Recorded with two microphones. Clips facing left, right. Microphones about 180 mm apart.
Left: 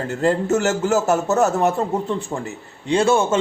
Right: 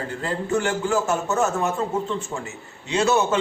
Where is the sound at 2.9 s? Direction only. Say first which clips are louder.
Left 3 dB; 30° left (ahead or behind).